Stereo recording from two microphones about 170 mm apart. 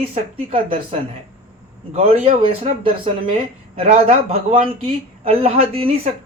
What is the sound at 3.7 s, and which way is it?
Speech, 35° right (ahead or behind).